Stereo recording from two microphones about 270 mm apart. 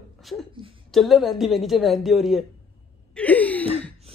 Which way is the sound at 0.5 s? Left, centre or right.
Centre.